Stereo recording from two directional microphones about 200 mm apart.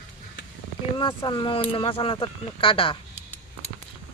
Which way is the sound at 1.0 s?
25° left (ahead or behind).